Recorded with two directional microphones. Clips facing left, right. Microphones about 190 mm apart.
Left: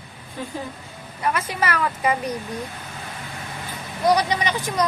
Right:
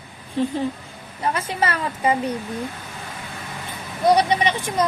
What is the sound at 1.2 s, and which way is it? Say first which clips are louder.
Speech: right 1 dB; 30° right (ahead or behind).